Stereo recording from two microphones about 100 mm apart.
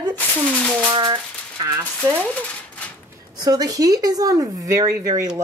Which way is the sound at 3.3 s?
40° right (ahead or behind).